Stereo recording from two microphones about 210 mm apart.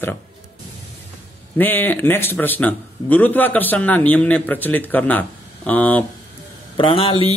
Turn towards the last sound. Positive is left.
turn(degrees=25)  # may be behind; listen again after turning